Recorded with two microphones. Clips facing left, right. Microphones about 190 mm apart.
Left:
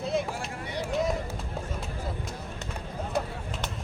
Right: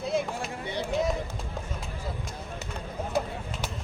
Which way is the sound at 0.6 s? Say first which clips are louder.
Right 1 dB; 25° right (ahead or behind).